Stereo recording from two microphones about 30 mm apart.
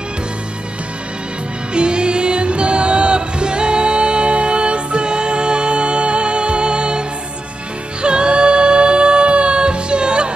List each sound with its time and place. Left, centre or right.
1.7 s music: right